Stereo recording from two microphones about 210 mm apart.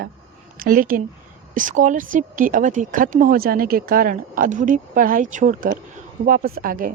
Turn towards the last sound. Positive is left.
turn(degrees=-40)  # may be behind; listen again after turning